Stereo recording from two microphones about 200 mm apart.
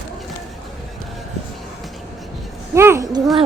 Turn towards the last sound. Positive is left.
turn(degrees=-15)  # may be behind; listen again after turning